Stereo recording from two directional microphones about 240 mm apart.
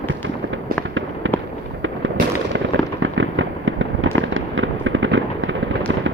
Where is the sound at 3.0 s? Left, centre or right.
Right.